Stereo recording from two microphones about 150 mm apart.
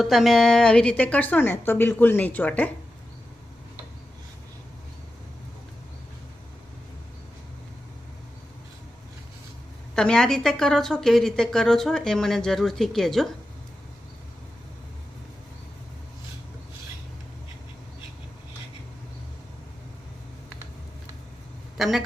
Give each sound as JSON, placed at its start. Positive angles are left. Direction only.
{"t": 0.0, "sound": "a woman's voice", "side_deg": 0}
{"t": 9.9, "sound": "a woman's voice", "side_deg": 5}
{"t": 21.8, "sound": "speech", "side_deg": 0}